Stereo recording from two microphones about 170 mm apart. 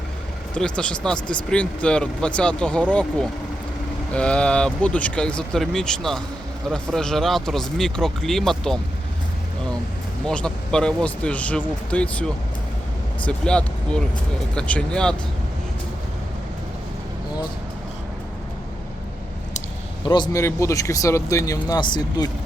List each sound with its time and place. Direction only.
0.5 s speech: 5° left (ahead or behind)
10.2 s speech: 5° left (ahead or behind)
13.2 s speech: 5° left (ahead or behind)
20.1 s speech: 25° left (ahead or behind)